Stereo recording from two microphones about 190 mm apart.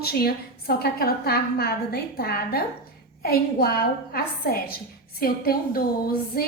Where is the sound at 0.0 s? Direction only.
55° left (ahead or behind).